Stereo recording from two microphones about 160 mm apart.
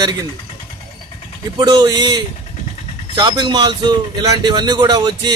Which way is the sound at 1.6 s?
25° right (ahead or behind).